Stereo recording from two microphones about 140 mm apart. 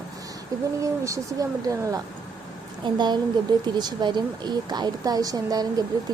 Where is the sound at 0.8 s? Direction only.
20° right (ahead or behind).